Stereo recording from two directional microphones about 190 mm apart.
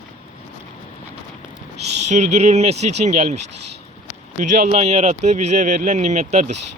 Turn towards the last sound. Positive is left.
turn(degrees=-40)  # may be behind; listen again after turning